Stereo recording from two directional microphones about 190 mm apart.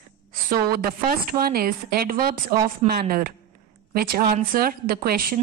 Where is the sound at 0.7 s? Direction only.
50° right (ahead or behind).